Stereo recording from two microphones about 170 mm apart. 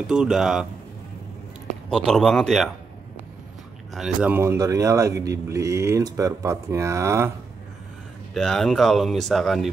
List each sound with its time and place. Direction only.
0.0 s speech: 5° right (ahead or behind)
1.9 s speech: 5° left (ahead or behind)
3.9 s a man's voice: 5° right (ahead or behind)
8.4 s speech: centre (ahead or behind)